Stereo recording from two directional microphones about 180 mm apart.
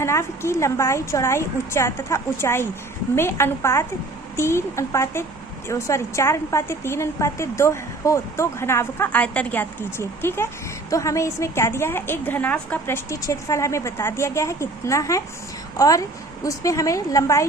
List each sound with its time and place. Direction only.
0.0 s a woman's voice: 15° left (ahead or behind)
16.4 s a woman's voice: 20° left (ahead or behind)